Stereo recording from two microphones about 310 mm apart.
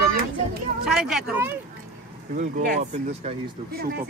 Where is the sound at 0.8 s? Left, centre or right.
Centre.